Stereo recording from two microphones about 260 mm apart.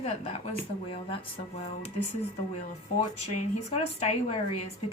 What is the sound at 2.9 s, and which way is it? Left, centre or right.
A woman's voice, left.